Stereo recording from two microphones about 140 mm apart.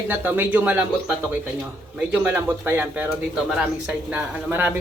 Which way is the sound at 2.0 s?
10° right (ahead or behind).